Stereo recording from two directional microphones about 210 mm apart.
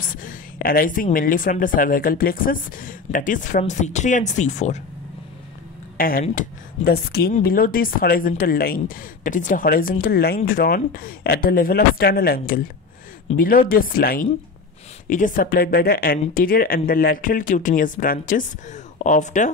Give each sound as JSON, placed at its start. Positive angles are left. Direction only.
{"t": 0.0, "sound": "a woman's voice", "side_deg": 40}
{"t": 5.9, "sound": "a woman's voice", "side_deg": 45}